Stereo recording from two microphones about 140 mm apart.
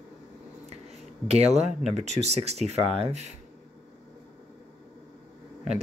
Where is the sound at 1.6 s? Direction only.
50° right (ahead or behind).